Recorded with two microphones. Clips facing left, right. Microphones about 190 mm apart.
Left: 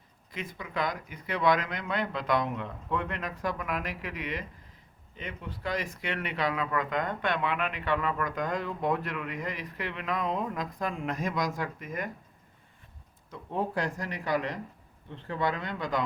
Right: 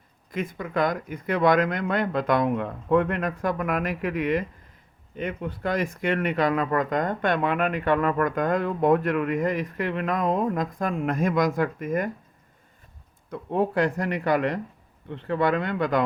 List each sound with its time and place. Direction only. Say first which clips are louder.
0.3 s speech: right 9 dB; 50° right (ahead or behind)
13.3 s speech: right 7 dB; 60° right (ahead or behind)